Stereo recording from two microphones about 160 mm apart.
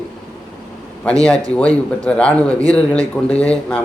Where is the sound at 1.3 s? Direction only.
20° right (ahead or behind).